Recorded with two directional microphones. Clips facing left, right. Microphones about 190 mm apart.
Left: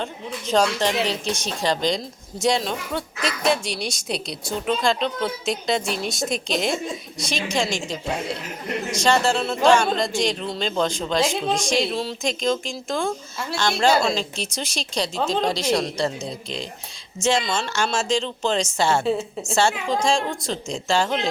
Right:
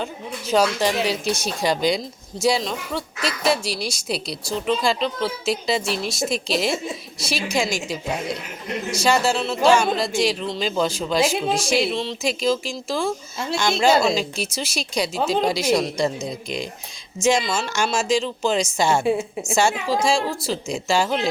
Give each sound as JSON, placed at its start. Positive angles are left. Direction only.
{"t": 0.0, "sound": "a woman's voice", "side_deg": -5}
{"t": 13.6, "sound": "a woman's voice", "side_deg": -15}
{"t": 13.8, "sound": "a woman's voice", "side_deg": -5}